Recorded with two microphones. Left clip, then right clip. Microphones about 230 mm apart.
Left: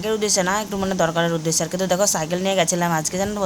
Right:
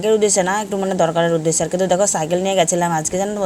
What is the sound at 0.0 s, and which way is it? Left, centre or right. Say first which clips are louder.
Speech: right 5 dB; centre.